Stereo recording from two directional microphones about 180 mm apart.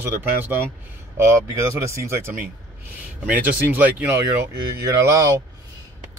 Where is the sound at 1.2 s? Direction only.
15° right (ahead or behind).